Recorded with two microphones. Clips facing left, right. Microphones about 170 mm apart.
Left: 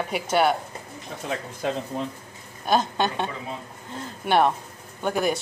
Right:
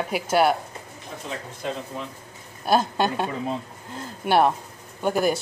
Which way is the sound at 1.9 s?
40° left (ahead or behind).